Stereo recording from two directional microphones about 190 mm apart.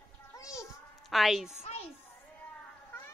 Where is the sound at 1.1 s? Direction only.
Centre (ahead or behind).